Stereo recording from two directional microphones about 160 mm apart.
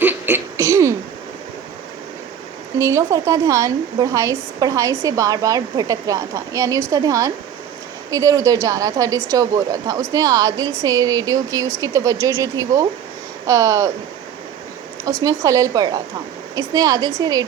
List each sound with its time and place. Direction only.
0.0 s a sound: 10° right (ahead or behind)
2.7 s speech: 20° right (ahead or behind)
15.2 s speech: 20° right (ahead or behind)